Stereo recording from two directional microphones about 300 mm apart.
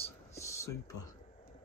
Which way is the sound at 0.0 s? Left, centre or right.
Centre.